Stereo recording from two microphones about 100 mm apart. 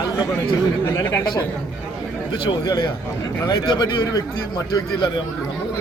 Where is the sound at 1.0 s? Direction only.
25° left (ahead or behind).